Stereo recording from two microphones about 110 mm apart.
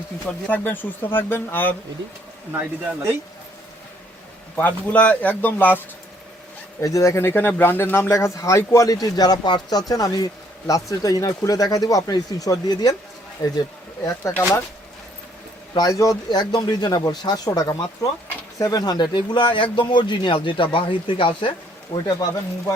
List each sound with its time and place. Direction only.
0.3 s speech: 10° left (ahead or behind)
2.5 s speech: 15° right (ahead or behind)
4.5 s speech: 10° left (ahead or behind)
6.8 s speech: 30° left (ahead or behind)
15.7 s speech: 35° left (ahead or behind); by 21.5 s 50° left (ahead or behind)
21.9 s speech: 35° left (ahead or behind)